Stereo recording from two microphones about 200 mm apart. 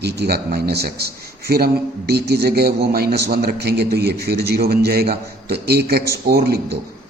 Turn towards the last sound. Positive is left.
turn(degrees=-55)  # may be behind; listen again after turning